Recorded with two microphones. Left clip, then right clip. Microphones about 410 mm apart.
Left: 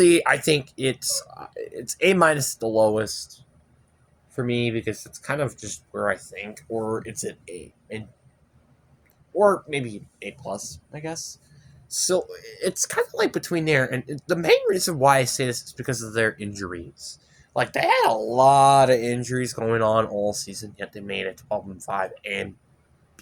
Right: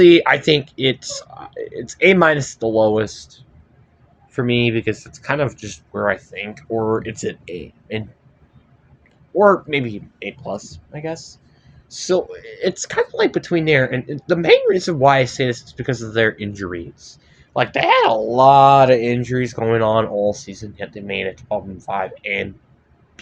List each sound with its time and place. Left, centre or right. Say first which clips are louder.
0.0 s speech: right 7 dB; left
9.4 s speech: right 6 dB; left